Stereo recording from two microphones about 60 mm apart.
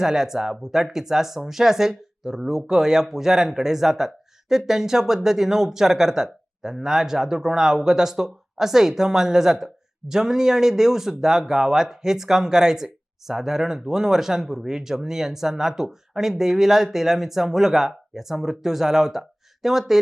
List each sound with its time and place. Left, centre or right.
0.0 s speech: centre